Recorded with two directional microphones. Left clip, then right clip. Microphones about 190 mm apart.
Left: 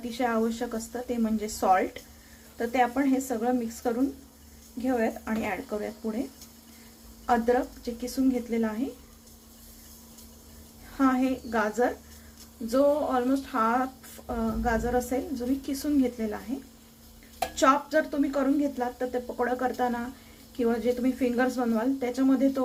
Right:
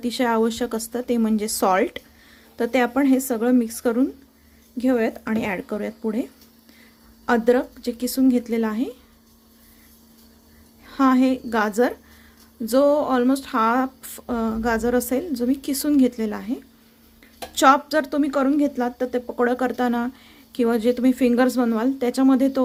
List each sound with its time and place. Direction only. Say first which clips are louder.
0.2 s speech: right 6 dB; 60° right (ahead or behind)
7.3 s speech: right 5 dB; 65° right (ahead or behind)
10.9 s speech: right 7 dB; 65° right (ahead or behind)
17.5 s speech: right 7 dB; 65° right (ahead or behind)